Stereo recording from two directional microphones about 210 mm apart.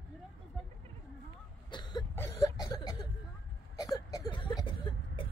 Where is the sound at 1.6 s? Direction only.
20° left (ahead or behind).